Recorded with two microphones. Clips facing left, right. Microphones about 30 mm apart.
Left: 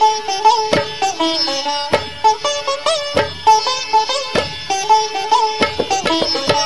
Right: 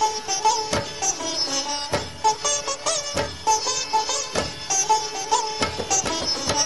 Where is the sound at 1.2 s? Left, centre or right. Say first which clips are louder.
Left 9 dB; left.